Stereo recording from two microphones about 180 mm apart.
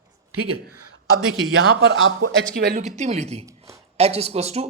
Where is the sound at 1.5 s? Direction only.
90° right.